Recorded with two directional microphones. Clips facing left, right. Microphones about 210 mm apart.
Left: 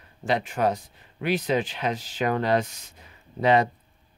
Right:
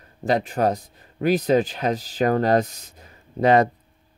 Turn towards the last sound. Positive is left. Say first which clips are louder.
# right 4 dB
turn(degrees=-45)  # may be behind; listen again after turning